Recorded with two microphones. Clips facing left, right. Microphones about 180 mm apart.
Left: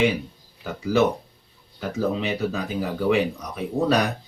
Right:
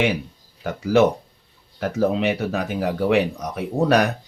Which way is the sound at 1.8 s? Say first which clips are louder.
Right 5 dB; 70° right (ahead or behind).